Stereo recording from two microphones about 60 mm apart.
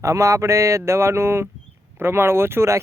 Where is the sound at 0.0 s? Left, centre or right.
Right.